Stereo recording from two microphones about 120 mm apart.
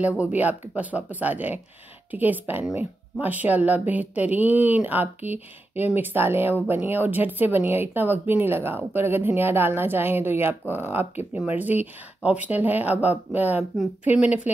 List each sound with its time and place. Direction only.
0.2 s speech: 15° right (ahead or behind)